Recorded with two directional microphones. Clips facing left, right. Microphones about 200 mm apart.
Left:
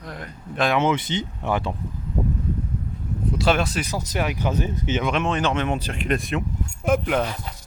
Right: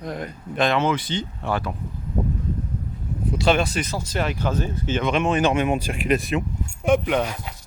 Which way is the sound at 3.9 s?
15° left (ahead or behind).